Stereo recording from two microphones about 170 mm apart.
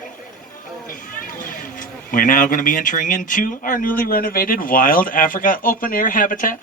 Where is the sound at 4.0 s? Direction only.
60° left (ahead or behind).